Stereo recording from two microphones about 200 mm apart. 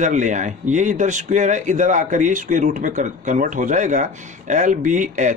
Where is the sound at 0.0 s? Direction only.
40° right (ahead or behind).